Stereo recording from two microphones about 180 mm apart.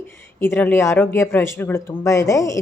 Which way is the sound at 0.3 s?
15° left (ahead or behind).